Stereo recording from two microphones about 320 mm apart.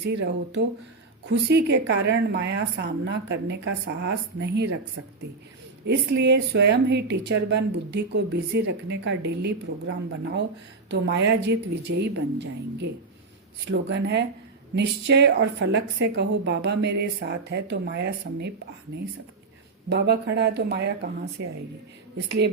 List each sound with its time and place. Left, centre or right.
0.0 s a woman's voice: right
5.8 s a woman's voice: right
19.9 s a woman's voice: right